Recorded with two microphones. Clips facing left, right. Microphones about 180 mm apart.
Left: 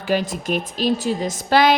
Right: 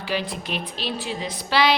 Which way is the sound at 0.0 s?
45° left (ahead or behind).